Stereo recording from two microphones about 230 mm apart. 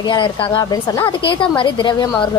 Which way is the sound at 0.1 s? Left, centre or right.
Left.